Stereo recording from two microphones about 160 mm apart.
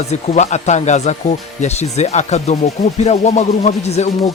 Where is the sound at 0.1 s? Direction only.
45° left (ahead or behind).